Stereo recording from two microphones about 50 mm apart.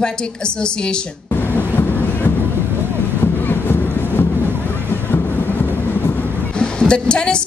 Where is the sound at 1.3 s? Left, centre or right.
Left.